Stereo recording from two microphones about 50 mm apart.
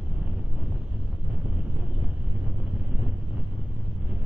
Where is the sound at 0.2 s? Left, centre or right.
Right.